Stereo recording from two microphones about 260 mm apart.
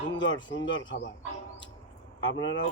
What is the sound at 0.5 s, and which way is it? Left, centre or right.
Speech, left.